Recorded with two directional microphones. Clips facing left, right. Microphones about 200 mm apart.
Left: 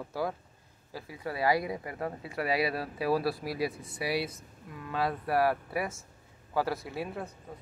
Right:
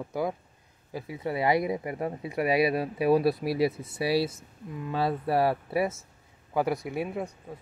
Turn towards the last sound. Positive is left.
turn(degrees=-20)  # may be behind; listen again after turning